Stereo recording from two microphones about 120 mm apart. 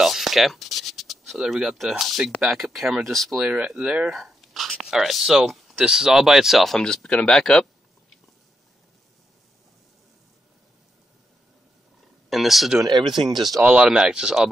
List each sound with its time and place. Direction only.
0.0 s a sound: centre (ahead or behind)
2.4 s speech: centre (ahead or behind)
3.4 s speech: 10° right (ahead or behind)
12.3 s speech: centre (ahead or behind)
12.8 s speech: 40° right (ahead or behind)
13.1 s speech: centre (ahead or behind)